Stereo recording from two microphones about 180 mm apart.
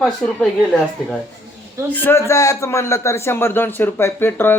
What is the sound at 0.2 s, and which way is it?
Speech, 5° left (ahead or behind).